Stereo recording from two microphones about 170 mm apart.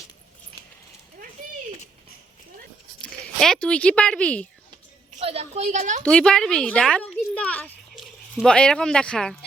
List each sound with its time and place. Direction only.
3.0 s speech: 5° left (ahead or behind)
5.2 s a woman's voice: 35° right (ahead or behind)
6.1 s a woman's voice: 5° left (ahead or behind)